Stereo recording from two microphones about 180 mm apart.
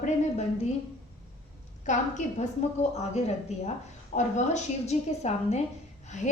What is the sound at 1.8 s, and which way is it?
A woman's voice, 40° left (ahead or behind).